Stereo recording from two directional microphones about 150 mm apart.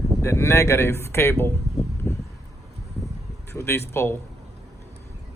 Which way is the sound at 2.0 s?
15° left (ahead or behind).